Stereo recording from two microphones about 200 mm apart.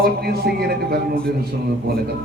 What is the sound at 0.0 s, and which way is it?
Speech, 50° right (ahead or behind).